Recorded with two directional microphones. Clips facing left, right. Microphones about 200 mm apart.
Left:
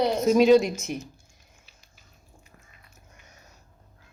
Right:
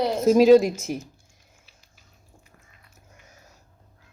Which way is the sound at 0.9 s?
35° right (ahead or behind).